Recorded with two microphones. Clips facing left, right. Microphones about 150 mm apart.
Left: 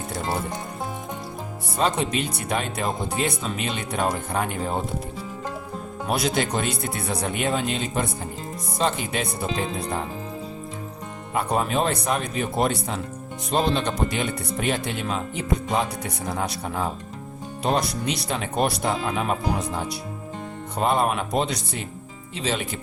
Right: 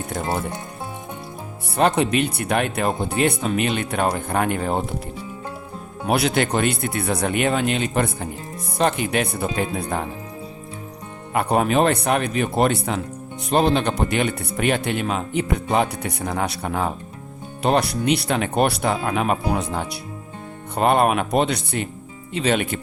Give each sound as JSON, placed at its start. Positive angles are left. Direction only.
{"t": 1.7, "sound": "speech", "side_deg": -60}
{"t": 6.1, "sound": "speech", "side_deg": -65}
{"t": 11.3, "sound": "speech", "side_deg": -65}